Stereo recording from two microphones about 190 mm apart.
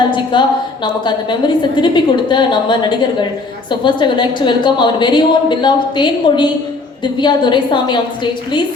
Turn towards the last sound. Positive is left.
turn(degrees=25)  # may be behind; listen again after turning